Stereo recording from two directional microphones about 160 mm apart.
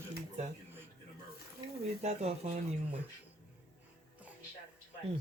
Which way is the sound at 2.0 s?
40° right (ahead or behind).